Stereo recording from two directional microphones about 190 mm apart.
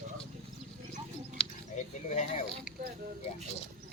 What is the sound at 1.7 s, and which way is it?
Mechanisms, 35° left (ahead or behind).